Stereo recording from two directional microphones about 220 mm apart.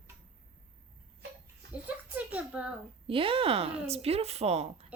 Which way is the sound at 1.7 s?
5° right (ahead or behind).